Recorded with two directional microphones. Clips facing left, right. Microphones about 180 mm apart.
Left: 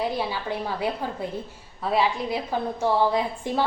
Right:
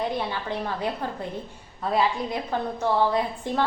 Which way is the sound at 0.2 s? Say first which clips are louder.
Left 1 dB; 5° left (ahead or behind).